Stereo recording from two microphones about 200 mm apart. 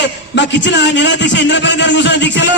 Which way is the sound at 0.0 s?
60° left (ahead or behind).